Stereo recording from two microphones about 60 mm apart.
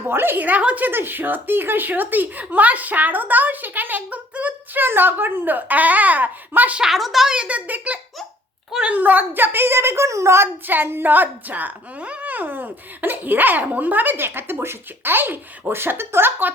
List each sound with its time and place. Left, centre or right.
0.1 s speech: right
0.4 s a child's voice: right
0.9 s speech: right
6.9 s speech: centre
7.3 s a child's voice: right
10.7 s speech: right